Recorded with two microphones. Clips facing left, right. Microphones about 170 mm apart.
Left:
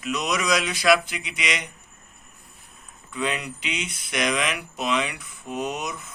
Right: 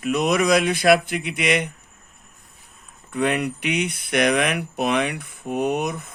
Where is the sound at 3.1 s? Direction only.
60° right (ahead or behind).